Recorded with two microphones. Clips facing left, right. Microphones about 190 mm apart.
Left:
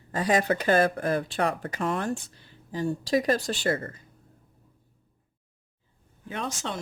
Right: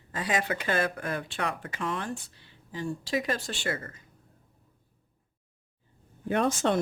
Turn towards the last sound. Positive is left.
turn(degrees=-55)  # may be behind; listen again after turning